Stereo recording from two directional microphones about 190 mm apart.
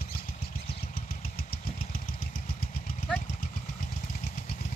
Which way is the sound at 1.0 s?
50° left (ahead or behind).